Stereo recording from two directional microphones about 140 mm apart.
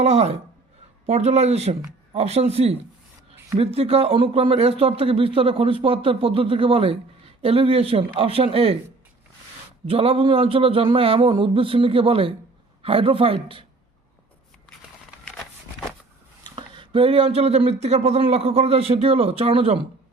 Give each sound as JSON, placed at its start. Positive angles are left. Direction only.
{"t": 0.0, "sound": "speech", "side_deg": -50}
{"t": 9.8, "sound": "speech", "side_deg": -40}
{"t": 16.4, "sound": "speech", "side_deg": -35}